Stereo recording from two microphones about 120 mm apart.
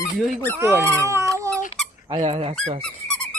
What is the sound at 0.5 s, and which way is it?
Speech, 20° right (ahead or behind).